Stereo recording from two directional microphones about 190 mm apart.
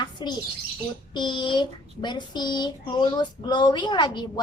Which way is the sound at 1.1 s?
25° left (ahead or behind).